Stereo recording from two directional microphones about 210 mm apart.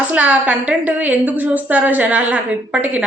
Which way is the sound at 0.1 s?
5° right (ahead or behind).